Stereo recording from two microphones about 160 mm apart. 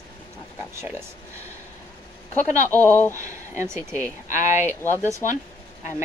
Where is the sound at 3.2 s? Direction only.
20° right (ahead or behind).